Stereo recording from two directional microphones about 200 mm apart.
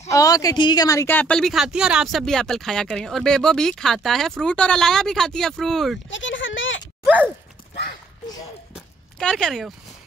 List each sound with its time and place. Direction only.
0.1 s a woman's voice: 15° left (ahead or behind); by 5.9 s centre (ahead or behind)
6.0 s speech: 65° left (ahead or behind)
8.7 s a sound: 5° left (ahead or behind)